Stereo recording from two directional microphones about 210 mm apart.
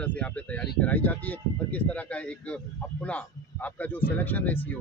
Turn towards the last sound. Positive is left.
turn(degrees=10)  # may be behind; listen again after turning